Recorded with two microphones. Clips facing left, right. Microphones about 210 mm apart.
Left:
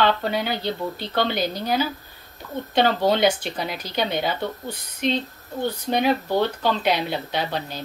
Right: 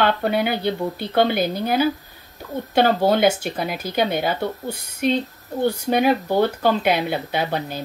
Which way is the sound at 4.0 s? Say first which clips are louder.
Right 3 dB; 50° right (ahead or behind).